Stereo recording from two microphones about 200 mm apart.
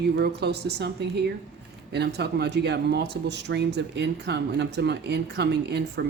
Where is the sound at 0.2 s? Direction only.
55° right (ahead or behind).